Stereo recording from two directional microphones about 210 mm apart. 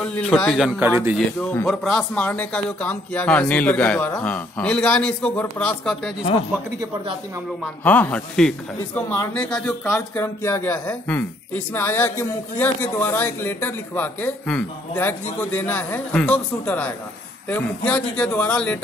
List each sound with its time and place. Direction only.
0.0 s speech: 5° left (ahead or behind); by 1.1 s 10° right (ahead or behind)
1.1 s speech: 5° left (ahead or behind)
7.8 s speech: 10° left (ahead or behind)